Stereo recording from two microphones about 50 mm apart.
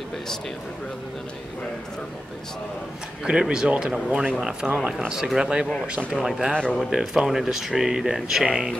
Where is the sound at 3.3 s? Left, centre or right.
Centre.